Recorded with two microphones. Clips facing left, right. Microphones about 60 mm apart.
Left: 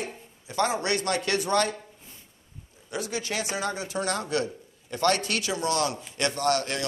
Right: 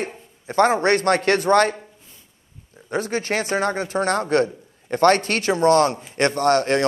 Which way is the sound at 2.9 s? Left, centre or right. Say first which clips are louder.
Right 8 dB; right.